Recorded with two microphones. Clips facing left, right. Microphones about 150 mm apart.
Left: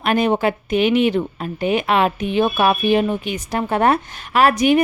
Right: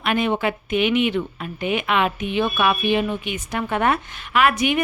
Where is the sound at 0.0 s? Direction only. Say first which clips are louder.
Left 4 dB; 40° left (ahead or behind).